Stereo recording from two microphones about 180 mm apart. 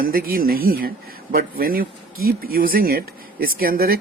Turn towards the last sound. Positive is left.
turn(degrees=-55)  # may be behind; listen again after turning